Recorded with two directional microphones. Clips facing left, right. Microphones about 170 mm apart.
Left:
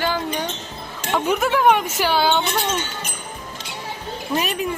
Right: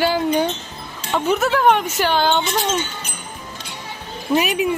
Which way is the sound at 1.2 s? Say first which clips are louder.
Right 1 dB; 10° left (ahead or behind).